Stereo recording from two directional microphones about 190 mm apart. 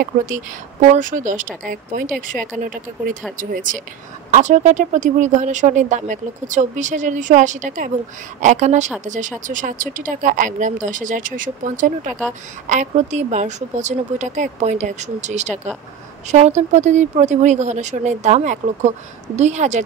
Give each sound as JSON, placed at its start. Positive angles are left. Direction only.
{"t": 0.0, "sound": "speech", "side_deg": -45}
{"t": 12.1, "sound": "speech", "side_deg": 5}
{"t": 12.6, "sound": "speech", "side_deg": -40}